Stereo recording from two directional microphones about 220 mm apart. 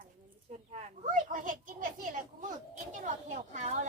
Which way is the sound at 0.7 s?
30° right (ahead or behind).